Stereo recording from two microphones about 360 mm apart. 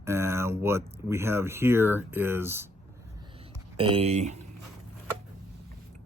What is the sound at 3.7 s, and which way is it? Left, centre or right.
Speech, centre.